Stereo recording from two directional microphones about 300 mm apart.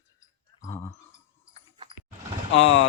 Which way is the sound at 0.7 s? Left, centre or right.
Centre.